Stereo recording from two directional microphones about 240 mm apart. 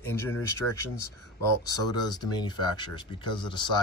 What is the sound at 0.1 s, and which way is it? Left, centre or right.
Speech, centre.